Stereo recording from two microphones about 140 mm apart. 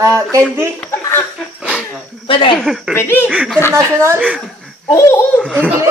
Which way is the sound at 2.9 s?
15° left (ahead or behind).